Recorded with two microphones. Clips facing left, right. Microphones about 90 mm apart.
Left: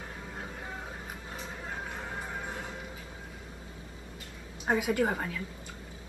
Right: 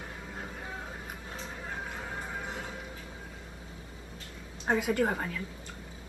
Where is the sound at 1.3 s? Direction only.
Centre (ahead or behind).